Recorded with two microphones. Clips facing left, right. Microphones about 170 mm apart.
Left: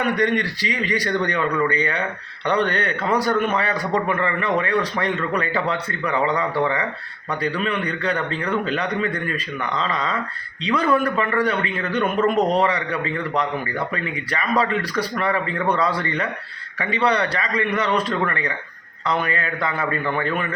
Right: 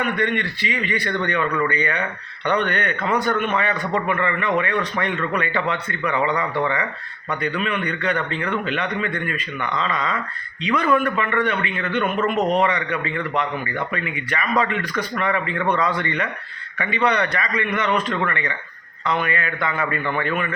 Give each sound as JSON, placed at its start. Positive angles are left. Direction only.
{"t": 0.0, "sound": "speech", "side_deg": 35}